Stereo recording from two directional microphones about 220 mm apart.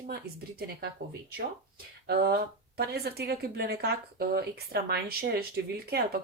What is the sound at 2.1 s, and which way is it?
A woman's voice, 50° right (ahead or behind).